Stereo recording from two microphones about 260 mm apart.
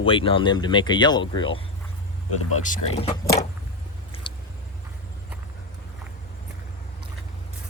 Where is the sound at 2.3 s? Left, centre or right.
Left.